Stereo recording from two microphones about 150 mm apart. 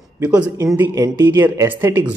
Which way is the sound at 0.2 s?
10° right (ahead or behind).